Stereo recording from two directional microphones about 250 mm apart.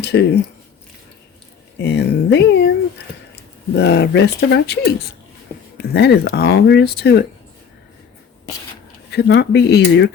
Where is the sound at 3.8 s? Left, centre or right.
Left.